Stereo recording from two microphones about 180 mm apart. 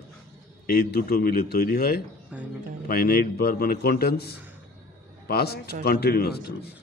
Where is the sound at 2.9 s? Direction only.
55° left (ahead or behind).